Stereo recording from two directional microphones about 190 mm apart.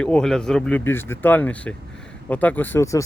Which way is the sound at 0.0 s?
5° left (ahead or behind).